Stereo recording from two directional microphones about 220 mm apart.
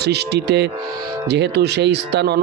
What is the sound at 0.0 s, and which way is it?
Speech, 50° right (ahead or behind).